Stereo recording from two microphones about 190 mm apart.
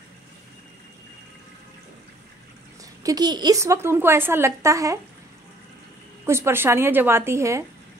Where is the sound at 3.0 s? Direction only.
20° right (ahead or behind).